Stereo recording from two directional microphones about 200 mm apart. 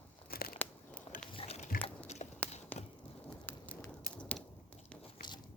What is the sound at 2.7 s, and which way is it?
Chop, 10° left (ahead or behind).